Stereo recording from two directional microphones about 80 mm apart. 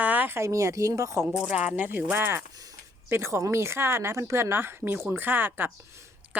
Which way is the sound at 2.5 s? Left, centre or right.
Right.